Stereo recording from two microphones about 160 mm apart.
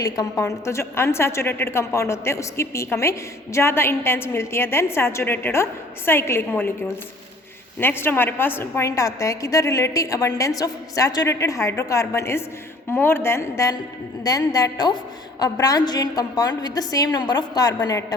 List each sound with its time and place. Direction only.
0.0 s a woman's voice: 20° left (ahead or behind)
7.8 s a woman's voice: 15° left (ahead or behind)